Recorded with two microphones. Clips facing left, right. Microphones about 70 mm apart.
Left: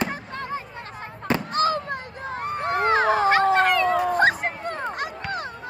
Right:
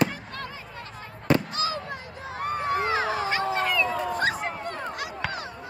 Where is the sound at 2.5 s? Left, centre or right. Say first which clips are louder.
Left 5 dB; left.